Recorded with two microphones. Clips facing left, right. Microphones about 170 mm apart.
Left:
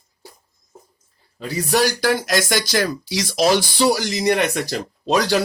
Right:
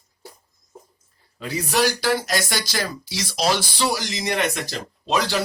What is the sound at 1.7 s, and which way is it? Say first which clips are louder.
Speech: left 3 dB; 45° left (ahead or behind).